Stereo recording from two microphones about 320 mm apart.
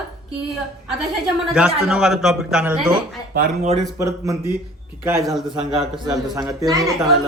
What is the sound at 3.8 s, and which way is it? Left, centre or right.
A man's voice, centre.